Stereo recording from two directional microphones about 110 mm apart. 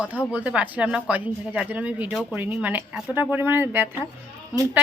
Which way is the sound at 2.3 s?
15° right (ahead or behind).